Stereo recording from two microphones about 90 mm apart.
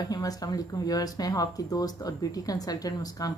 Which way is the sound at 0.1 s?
45° left (ahead or behind).